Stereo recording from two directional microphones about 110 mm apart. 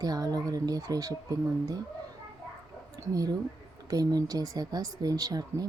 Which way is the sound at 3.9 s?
35° right (ahead or behind).